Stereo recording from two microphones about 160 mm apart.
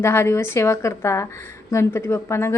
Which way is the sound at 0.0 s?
15° left (ahead or behind).